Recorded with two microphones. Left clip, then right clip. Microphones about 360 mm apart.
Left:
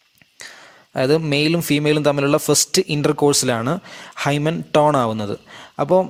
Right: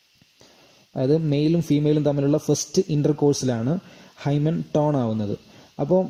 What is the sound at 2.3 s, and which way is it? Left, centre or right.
Speech, left.